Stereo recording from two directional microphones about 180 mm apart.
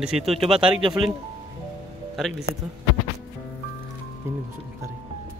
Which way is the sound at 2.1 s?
Centre (ahead or behind).